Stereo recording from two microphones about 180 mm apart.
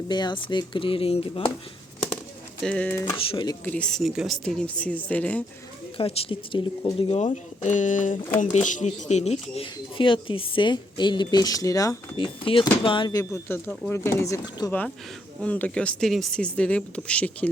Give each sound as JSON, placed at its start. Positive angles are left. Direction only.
{"t": 0.1, "sound": "speech", "side_deg": 25}
{"t": 2.6, "sound": "speech", "side_deg": 10}
{"t": 3.0, "sound": "speech", "side_deg": 25}
{"t": 3.6, "sound": "speech", "side_deg": 5}
{"t": 6.0, "sound": "speech", "side_deg": 30}